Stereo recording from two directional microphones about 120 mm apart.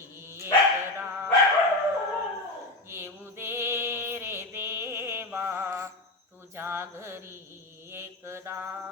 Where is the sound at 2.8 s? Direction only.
20° right (ahead or behind).